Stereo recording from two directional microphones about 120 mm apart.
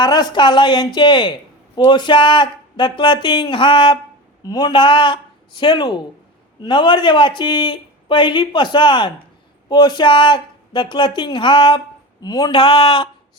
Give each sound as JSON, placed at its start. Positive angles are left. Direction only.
{"t": 0.0, "sound": "a man's voice", "side_deg": 40}